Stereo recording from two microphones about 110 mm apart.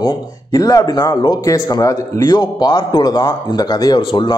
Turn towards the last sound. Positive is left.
turn(degrees=45)  # may be behind; listen again after turning